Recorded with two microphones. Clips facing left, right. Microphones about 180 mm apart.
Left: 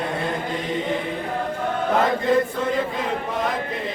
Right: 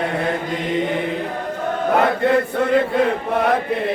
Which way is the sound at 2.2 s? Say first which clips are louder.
Right 3 dB; 65° right (ahead or behind).